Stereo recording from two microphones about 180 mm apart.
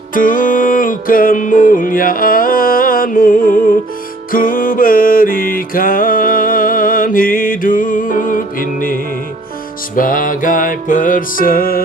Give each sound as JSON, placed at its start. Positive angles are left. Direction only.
{"t": 0.1, "sound": "music", "side_deg": 50}
{"t": 9.9, "sound": "music", "side_deg": 50}